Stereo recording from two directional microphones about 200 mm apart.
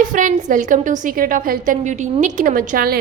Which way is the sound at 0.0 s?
40° right (ahead or behind).